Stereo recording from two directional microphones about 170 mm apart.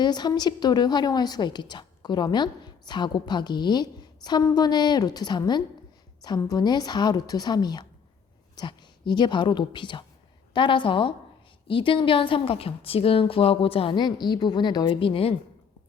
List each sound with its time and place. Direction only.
0.0 s a woman's voice: 25° left (ahead or behind)